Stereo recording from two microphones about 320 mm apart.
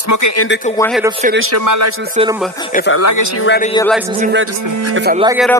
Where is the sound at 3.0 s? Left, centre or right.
Left.